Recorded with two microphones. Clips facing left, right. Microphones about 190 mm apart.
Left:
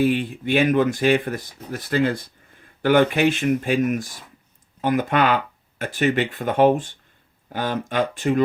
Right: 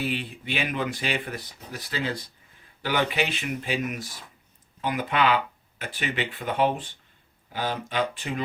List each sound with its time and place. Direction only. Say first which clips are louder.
0.0 s speech: left 10 dB; 50° left (ahead or behind)